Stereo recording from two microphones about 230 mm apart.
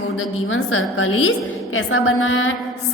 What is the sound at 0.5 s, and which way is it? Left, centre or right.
A woman's voice, left.